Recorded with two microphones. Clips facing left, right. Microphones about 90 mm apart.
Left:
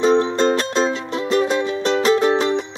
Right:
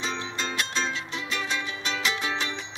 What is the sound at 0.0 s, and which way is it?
Music, 45° left (ahead or behind).